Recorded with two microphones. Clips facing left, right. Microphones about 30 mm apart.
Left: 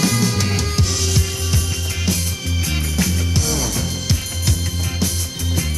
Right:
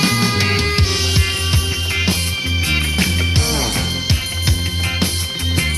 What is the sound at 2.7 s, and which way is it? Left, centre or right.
Music, right.